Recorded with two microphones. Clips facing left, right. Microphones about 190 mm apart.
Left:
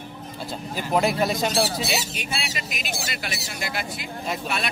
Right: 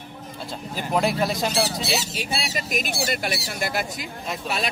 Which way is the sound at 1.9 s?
35° right (ahead or behind).